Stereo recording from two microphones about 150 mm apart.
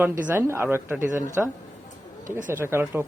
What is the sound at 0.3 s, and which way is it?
Speech, 15° right (ahead or behind).